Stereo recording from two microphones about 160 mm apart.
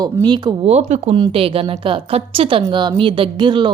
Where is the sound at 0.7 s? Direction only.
40° right (ahead or behind).